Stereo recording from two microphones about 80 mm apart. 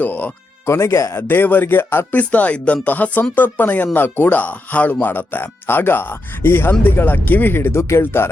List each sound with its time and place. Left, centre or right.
0.0 s speech: left
0.6 s speech: left